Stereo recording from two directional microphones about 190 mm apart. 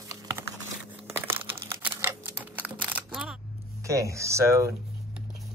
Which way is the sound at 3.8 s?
15° right (ahead or behind).